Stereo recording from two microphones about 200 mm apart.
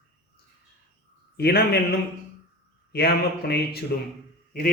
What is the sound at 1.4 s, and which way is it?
Speech, 50° left (ahead or behind).